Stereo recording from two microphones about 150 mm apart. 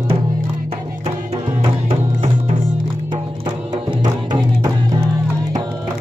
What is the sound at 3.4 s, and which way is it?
Music, 30° right (ahead or behind).